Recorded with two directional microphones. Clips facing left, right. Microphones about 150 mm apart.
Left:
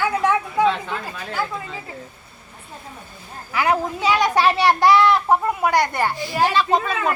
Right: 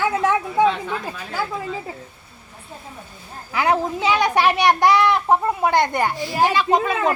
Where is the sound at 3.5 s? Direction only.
25° right (ahead or behind).